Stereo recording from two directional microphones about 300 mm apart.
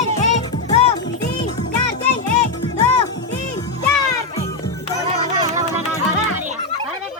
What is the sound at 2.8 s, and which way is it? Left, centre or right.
Music, centre.